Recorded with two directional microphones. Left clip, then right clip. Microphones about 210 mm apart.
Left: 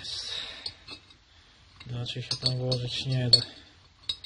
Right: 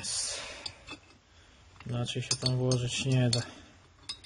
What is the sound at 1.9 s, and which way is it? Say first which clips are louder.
Speech: even; 40° right (ahead or behind).